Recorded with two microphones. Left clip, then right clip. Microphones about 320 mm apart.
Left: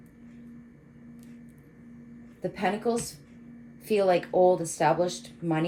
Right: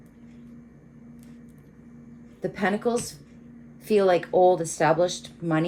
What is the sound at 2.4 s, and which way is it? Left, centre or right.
Speech, right.